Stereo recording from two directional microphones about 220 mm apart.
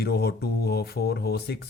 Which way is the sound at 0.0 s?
45° left (ahead or behind).